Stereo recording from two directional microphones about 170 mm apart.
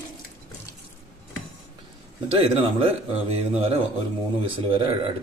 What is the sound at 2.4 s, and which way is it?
Speech, 35° right (ahead or behind).